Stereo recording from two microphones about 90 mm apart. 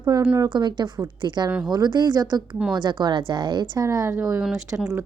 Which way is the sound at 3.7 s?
35° right (ahead or behind).